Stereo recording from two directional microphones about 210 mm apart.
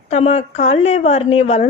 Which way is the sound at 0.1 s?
30° left (ahead or behind).